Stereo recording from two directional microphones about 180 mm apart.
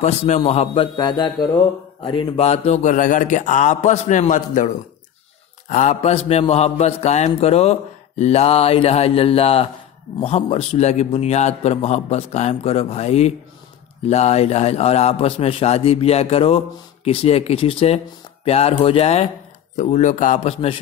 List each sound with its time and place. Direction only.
0.0 s a man's voice: 40° left (ahead or behind)